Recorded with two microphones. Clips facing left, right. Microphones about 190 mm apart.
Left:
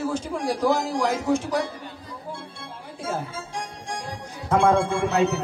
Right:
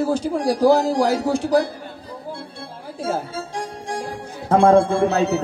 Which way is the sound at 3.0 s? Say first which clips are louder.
Right 5 dB; 35° right (ahead or behind).